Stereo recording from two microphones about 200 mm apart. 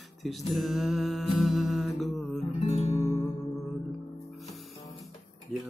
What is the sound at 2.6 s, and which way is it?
Music, 30° left (ahead or behind).